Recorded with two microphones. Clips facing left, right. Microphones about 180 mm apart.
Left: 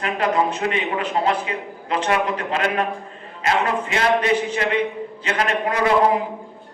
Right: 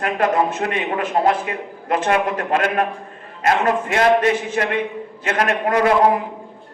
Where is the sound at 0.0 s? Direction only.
50° right (ahead or behind).